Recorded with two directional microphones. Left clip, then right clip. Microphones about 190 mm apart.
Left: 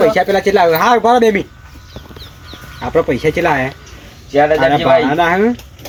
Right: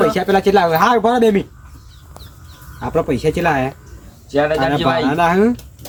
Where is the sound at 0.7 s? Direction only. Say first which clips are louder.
Left 2 dB; 25° right (ahead or behind).